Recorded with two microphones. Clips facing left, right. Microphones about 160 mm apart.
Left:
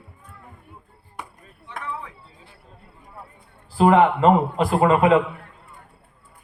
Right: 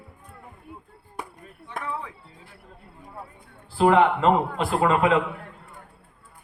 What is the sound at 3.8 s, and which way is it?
A man's voice, 45° left (ahead or behind).